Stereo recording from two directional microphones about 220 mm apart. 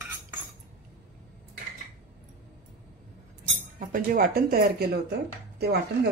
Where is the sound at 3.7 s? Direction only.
40° right (ahead or behind).